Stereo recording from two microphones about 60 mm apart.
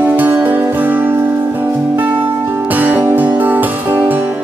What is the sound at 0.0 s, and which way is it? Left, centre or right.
Music, right.